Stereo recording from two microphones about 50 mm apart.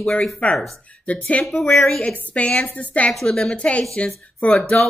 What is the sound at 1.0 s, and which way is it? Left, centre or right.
Speech, left.